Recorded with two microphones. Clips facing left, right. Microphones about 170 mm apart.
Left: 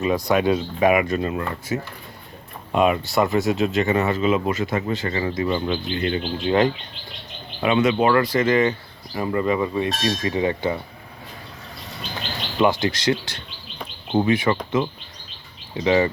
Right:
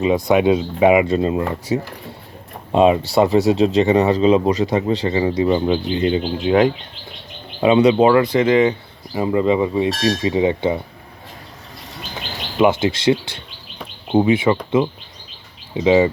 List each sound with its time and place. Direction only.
0.0 s speech: 20° right (ahead or behind)
5.4 s speech: 20° right (ahead or behind)
5.6 s speech: 35° right (ahead or behind)
5.9 s speech: 20° right (ahead or behind)
6.4 s speech: centre (ahead or behind)
7.6 s speech: 30° right (ahead or behind)
8.0 s speech: 15° right (ahead or behind)
12.6 s speech: 25° right (ahead or behind)
14.1 s speech: 10° right (ahead or behind)
14.3 s speech: 25° right (ahead or behind)
15.7 s speech: 15° right (ahead or behind)